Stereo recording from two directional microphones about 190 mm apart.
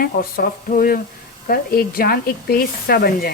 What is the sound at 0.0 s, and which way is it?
Speech, 50° left (ahead or behind).